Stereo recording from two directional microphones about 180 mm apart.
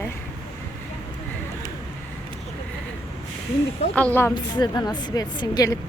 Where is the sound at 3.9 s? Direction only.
10° left (ahead or behind).